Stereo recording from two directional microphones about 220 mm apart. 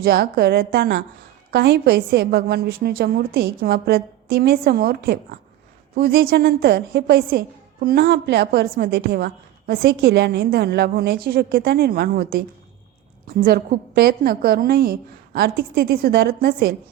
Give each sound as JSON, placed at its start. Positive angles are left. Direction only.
{"t": 0.0, "sound": "a woman's voice", "side_deg": -45}